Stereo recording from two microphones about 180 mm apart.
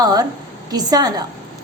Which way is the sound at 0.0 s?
20° right (ahead or behind).